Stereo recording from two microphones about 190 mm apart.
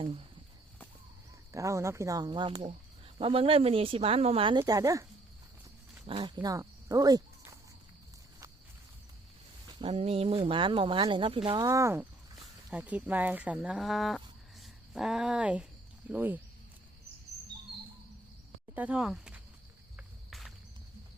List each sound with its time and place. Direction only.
0.0 s speech: 30° right (ahead or behind)
1.5 s speech: 15° right (ahead or behind)
4.6 s speech: 15° right (ahead or behind)
6.1 s speech: 25° right (ahead or behind)
9.6 s speech: 25° right (ahead or behind); by 16.4 s 10° right (ahead or behind)
18.7 s speech: 5° right (ahead or behind)
20.0 s cricket: centre (ahead or behind)